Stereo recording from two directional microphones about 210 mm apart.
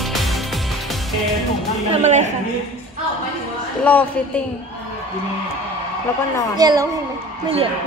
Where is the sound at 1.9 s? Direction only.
35° right (ahead or behind).